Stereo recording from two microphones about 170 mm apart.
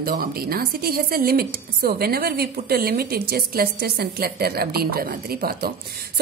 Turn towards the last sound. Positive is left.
turn(degrees=-65)  # may be behind; listen again after turning